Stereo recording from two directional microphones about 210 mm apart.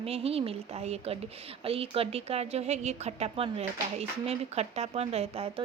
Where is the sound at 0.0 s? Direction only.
30° right (ahead or behind).